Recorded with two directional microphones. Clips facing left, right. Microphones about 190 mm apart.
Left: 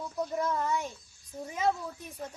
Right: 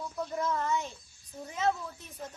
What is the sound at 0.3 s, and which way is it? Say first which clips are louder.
A woman's voice: even; 10° left (ahead or behind).